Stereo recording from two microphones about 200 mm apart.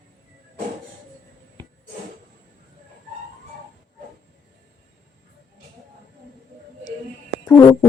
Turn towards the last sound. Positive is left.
turn(degrees=10)  # may be behind; listen again after turning